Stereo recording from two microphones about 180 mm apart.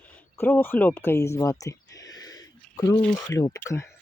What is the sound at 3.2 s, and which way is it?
Speech, 20° left (ahead or behind).